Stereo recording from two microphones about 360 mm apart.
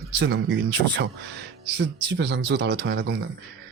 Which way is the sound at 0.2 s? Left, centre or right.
Right.